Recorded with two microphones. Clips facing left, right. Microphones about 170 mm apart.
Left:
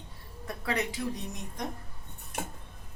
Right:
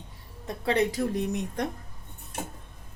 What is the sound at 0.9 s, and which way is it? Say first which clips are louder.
Speech: right 8 dB; 55° right (ahead or behind).